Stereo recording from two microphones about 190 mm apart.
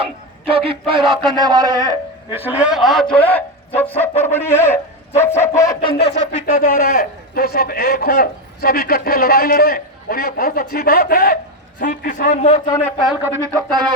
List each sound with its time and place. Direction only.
0.4 s a man's voice: 30° right (ahead or behind)
2.3 s a man's voice: 10° right (ahead or behind); by 3.4 s 10° left (ahead or behind)
3.8 s fowl: 10° left (ahead or behind); by 6.4 s 35° left (ahead or behind)
6.4 s a man's voice: 50° left (ahead or behind)
12.6 s fowl: 20° left (ahead or behind)
13.2 s speech: 15° right (ahead or behind)